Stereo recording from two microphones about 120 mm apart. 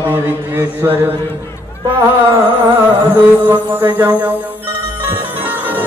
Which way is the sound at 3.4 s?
15° right (ahead or behind).